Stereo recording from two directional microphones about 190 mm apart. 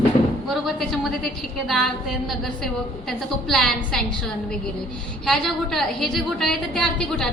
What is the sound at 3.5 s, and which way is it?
Speech, centre (ahead or behind).